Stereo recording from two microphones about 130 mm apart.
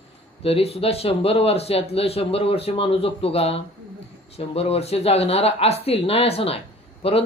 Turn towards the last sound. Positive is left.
turn(degrees=45)  # may be behind; listen again after turning